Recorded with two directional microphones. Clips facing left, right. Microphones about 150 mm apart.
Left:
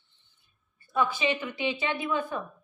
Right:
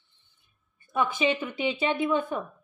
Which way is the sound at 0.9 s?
20° right (ahead or behind).